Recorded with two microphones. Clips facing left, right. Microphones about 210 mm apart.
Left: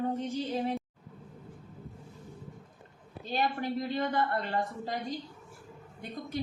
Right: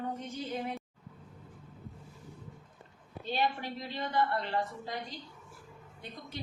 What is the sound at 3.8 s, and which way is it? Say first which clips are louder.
Child singing: right 1 dB; 50° left (ahead or behind).